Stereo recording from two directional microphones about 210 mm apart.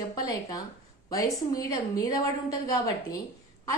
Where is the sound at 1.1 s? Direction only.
15° left (ahead or behind).